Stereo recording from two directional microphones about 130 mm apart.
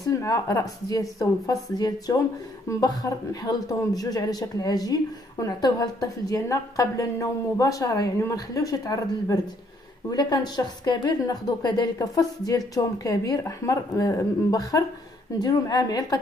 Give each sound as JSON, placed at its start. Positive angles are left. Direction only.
{"t": 0.0, "sound": "a man's voice", "side_deg": 25}